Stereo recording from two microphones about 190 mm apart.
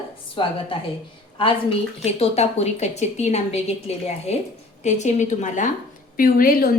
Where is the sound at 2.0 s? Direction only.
35° left (ahead or behind).